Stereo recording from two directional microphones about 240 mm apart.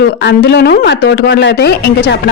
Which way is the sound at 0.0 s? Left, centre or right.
Left.